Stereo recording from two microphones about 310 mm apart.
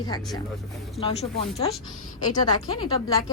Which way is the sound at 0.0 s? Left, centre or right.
Centre.